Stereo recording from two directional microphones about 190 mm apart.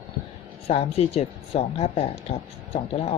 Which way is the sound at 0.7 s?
30° left (ahead or behind).